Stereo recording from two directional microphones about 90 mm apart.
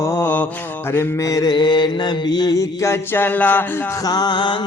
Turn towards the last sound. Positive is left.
turn(degrees=55)  # may be behind; listen again after turning